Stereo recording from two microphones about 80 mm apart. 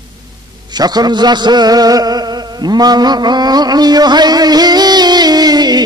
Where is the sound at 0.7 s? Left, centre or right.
Right.